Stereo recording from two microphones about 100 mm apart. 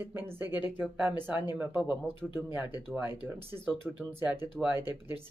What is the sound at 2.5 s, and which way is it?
Speech, 15° right (ahead or behind).